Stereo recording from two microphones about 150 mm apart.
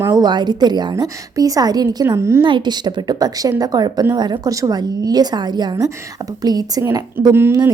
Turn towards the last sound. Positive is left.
turn(degrees=-15)  # may be behind; listen again after turning